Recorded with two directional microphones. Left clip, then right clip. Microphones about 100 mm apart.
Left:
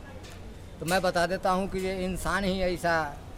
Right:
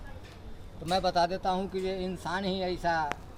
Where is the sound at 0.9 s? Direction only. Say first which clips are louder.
Left 1 dB; 65° left (ahead or behind).